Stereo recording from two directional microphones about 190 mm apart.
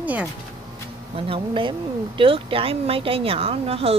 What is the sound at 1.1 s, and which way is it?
Speech, 25° right (ahead or behind).